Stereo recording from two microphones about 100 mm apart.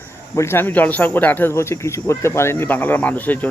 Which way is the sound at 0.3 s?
25° left (ahead or behind).